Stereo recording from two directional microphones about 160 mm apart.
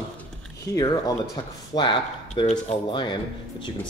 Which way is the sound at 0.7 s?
25° left (ahead or behind).